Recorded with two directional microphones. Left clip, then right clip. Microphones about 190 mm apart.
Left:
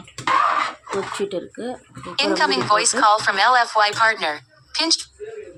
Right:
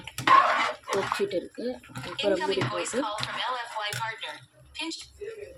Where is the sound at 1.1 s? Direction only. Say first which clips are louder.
Left 3 dB; centre (ahead or behind).